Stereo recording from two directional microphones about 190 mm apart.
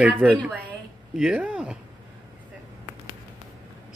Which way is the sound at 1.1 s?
5° right (ahead or behind).